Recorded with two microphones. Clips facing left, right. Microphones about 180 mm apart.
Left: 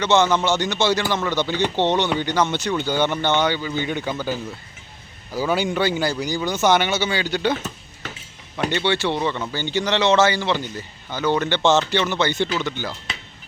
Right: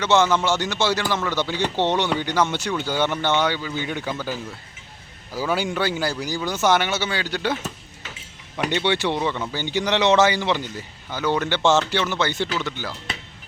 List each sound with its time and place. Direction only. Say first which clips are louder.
0.0 s speech: left 1 dB; 5° right (ahead or behind)
8.7 s speech: even; 15° right (ahead or behind)
9.1 s speech: left 1 dB; 5° right (ahead or behind)